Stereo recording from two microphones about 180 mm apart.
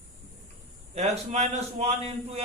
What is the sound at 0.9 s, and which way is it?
A man's voice, 35° right (ahead or behind).